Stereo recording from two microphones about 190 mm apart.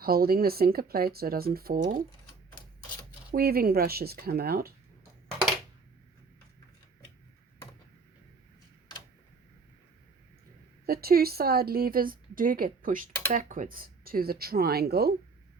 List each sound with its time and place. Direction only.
0.0 s a woman's voice: 50° right (ahead or behind)
3.3 s a woman's voice: 50° right (ahead or behind)
10.8 s a woman's voice: 55° right (ahead or behind)